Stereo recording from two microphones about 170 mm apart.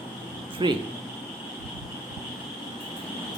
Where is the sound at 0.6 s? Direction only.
25° right (ahead or behind).